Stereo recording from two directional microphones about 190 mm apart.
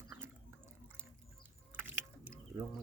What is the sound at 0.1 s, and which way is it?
Water, 15° right (ahead or behind).